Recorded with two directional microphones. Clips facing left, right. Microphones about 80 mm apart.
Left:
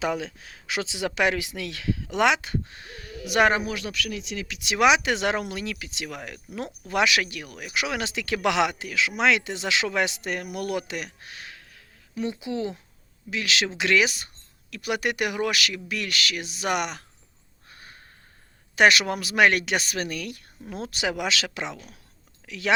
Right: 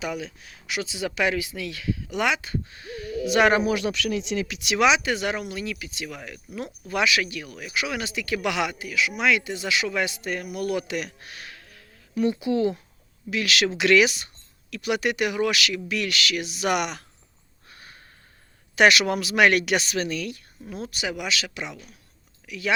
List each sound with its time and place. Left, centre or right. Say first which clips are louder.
0.0 s speech: left 3 dB; left
3.4 s speech: right 1 dB; left
3.7 s speech: right 6 dB; right
4.8 s speech: left 1 dB; left
5.1 s speech: left 2 dB; left
6.8 s speech: left 1 dB; left
12.1 s speech: right 6 dB; left
18.8 s speech: right 1 dB; left
20.7 s speech: left 2 dB; left